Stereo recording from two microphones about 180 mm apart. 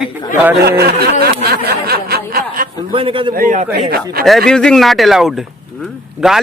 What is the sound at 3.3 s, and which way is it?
Speech, 50° right (ahead or behind).